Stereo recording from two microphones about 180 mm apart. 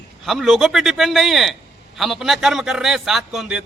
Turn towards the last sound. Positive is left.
turn(degrees=0)  # may be behind; listen again after turning